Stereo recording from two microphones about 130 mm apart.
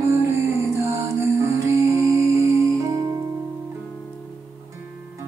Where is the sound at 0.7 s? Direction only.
25° right (ahead or behind).